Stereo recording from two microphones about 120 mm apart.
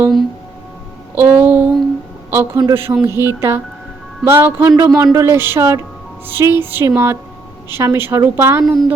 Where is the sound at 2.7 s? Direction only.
20° right (ahead or behind).